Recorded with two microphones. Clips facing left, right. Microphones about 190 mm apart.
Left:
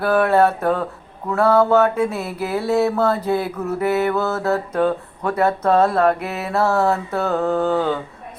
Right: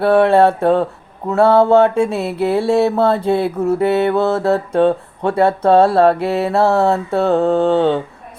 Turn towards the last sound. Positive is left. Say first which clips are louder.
# right 5 dB
turn(degrees=-25)  # may be behind; listen again after turning